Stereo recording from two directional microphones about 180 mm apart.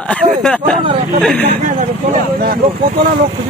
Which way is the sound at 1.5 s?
40° right (ahead or behind).